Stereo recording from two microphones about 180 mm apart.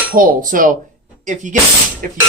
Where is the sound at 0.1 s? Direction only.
50° right (ahead or behind).